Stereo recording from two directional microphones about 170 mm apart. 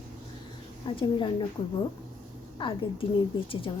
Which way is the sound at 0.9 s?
30° left (ahead or behind).